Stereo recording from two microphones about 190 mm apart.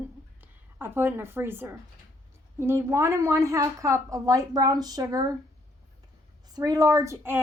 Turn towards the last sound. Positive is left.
turn(degrees=-10)  # may be behind; listen again after turning